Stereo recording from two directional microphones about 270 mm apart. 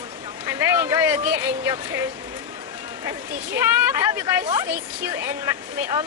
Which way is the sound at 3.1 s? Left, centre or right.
Centre.